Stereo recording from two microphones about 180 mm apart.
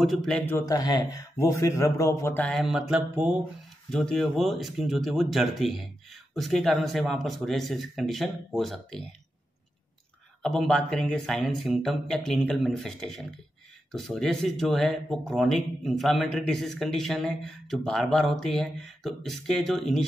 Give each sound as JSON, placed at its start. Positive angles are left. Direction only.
{"t": 0.0, "sound": "a man's voice", "side_deg": 0}
{"t": 10.4, "sound": "speech", "side_deg": 0}